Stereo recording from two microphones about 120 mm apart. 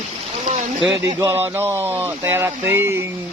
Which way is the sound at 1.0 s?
35° right (ahead or behind).